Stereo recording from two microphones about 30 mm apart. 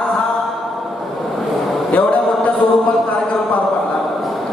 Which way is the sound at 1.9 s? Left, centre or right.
Left.